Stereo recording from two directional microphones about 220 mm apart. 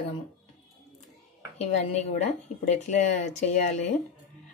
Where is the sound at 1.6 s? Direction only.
30° left (ahead or behind).